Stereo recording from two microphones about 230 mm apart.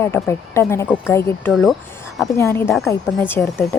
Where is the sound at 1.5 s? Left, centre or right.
Centre.